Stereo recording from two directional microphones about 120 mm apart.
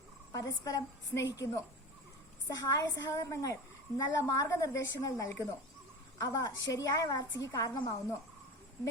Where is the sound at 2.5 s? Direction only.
35° left (ahead or behind).